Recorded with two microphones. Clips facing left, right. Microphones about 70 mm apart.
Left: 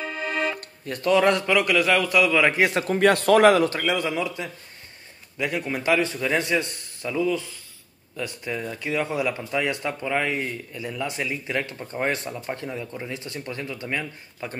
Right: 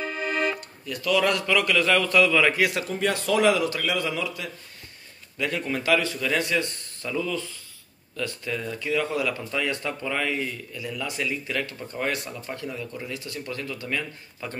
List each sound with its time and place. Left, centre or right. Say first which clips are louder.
0.0 s music: even; centre
0.6 s speech: left 2 dB; left
2.9 s speech: left 7 dB; left
3.8 s speech: left 2 dB; left